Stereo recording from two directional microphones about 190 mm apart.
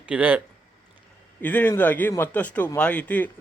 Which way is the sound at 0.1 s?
5° right (ahead or behind).